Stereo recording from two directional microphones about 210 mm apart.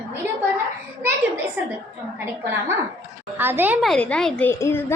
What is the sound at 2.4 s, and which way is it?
A woman's voice, 10° right (ahead or behind).